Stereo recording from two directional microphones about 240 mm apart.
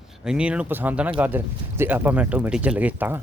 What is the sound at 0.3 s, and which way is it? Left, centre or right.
Speech, centre.